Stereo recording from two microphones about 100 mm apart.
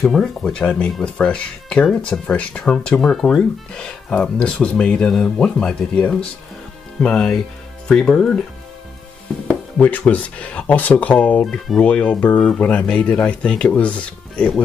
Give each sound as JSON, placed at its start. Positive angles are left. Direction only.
{"t": 0.0, "sound": "speech", "side_deg": 0}
{"t": 9.8, "sound": "speech", "side_deg": 15}